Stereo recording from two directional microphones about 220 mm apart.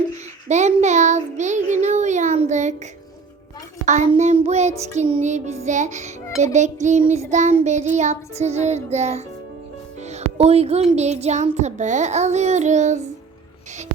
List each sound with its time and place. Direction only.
0.4 s speech: 30° right (ahead or behind)
3.8 s speech: 30° right (ahead or behind)
10.1 s music: 30° right (ahead or behind)
10.9 s speech: 30° right (ahead or behind)